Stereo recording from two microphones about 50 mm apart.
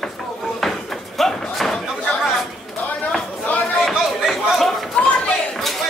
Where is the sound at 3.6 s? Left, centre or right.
Centre.